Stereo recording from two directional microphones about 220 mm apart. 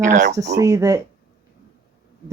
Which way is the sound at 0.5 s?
15° right (ahead or behind).